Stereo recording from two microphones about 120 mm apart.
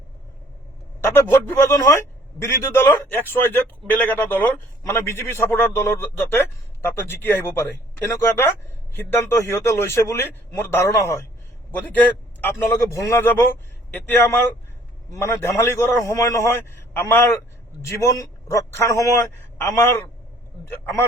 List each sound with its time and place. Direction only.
1.0 s a man's voice: 20° left (ahead or behind)
11.9 s a man's voice: 15° left (ahead or behind)